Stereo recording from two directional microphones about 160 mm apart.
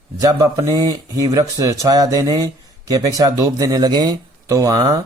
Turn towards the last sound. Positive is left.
turn(degrees=-25)  # may be behind; listen again after turning